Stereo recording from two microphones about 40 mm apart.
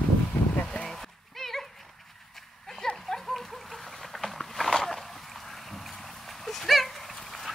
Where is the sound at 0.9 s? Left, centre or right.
Centre.